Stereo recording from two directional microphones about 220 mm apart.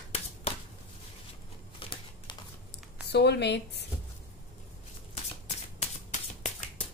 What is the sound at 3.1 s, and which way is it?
Speech, 50° left (ahead or behind).